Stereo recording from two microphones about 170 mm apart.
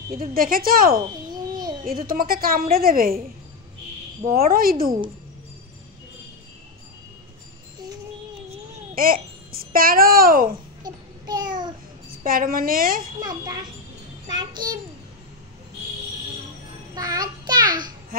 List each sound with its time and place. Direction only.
0.1 s a woman's voice: 60° right (ahead or behind)
4.4 s a woman's voice: 60° right (ahead or behind)
8.9 s a child's voice: 55° right (ahead or behind)
10.8 s child singing: 25° right (ahead or behind)
12.2 s a woman's voice: 55° right (ahead or behind)
13.2 s a child's voice: 25° right (ahead or behind)
16.9 s child singing: 20° right (ahead or behind)